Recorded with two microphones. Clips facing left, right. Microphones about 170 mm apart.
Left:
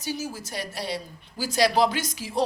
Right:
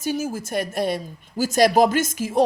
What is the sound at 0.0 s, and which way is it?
A woman's voice, 50° right (ahead or behind).